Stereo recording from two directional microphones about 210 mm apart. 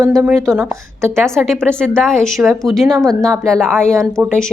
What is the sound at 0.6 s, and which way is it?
Speech, 10° right (ahead or behind).